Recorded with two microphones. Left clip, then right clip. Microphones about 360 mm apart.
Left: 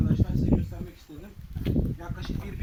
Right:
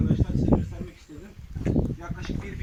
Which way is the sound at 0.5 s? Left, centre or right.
Right.